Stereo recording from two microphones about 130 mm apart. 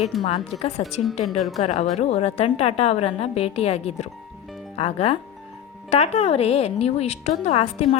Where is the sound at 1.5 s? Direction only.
60° left (ahead or behind).